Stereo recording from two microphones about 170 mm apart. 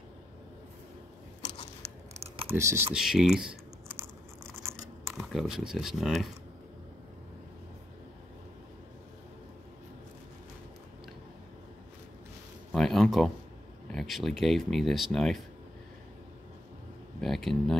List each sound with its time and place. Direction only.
2.1 s computer keyboard: 35° right (ahead or behind)
2.5 s speech: 15° right (ahead or behind)
2.9 s speech: 5° right (ahead or behind)
4.6 s a sound: 15° right (ahead or behind)
5.3 s speech: centre (ahead or behind)
12.7 s speech: centre (ahead or behind)
17.2 s speech: centre (ahead or behind)